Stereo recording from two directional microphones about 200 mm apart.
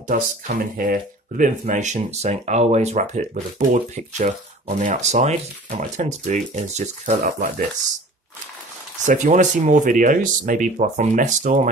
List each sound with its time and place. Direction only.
0.0 s speech: 40° right (ahead or behind)
9.0 s speech: 40° right (ahead or behind)